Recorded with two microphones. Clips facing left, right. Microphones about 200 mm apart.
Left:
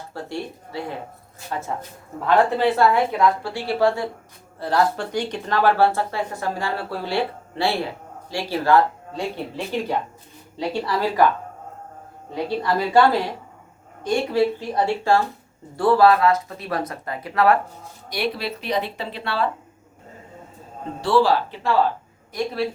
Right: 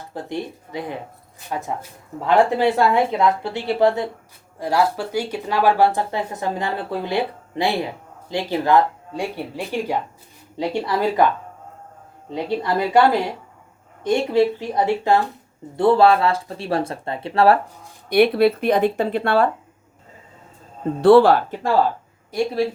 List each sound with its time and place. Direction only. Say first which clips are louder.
0.1 s speech: right 3 dB; 20° right (ahead or behind)
4.6 s speech: right 1 dB; 10° right (ahead or behind)
12.3 s speech: right 1 dB; 20° right (ahead or behind)
18.1 s speech: right 11 dB; 55° right (ahead or behind)
21.0 s speech: right 7 dB; 55° right (ahead or behind)